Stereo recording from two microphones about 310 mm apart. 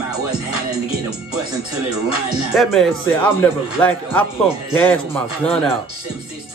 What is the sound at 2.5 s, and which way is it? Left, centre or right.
Speech, centre.